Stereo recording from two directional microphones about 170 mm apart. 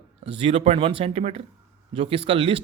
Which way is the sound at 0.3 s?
35° right (ahead or behind).